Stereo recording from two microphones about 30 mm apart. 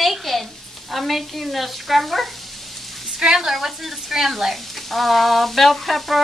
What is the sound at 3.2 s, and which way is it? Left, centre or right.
Speech, right.